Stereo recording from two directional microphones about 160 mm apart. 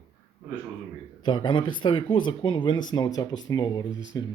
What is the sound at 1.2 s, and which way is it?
Speech, 30° left (ahead or behind).